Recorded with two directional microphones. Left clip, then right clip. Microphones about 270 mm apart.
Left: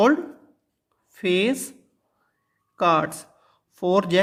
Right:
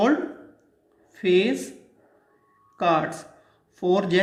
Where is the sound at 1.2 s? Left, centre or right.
Left.